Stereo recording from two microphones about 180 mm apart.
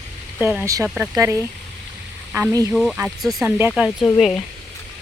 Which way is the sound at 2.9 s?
5° right (ahead or behind).